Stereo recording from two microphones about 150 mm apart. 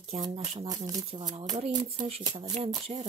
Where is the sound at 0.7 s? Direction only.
25° right (ahead or behind).